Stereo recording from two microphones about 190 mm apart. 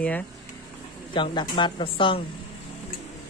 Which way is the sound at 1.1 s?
25° left (ahead or behind).